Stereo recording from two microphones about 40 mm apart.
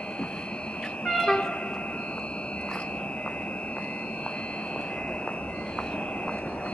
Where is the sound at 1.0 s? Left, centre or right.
Centre.